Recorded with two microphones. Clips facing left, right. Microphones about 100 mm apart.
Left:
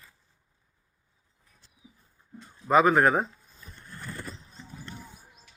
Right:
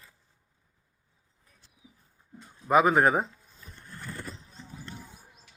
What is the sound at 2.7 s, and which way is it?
Speech, 10° right (ahead or behind).